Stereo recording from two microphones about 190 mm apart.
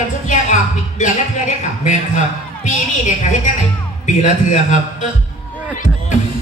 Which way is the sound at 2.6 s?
40° left (ahead or behind).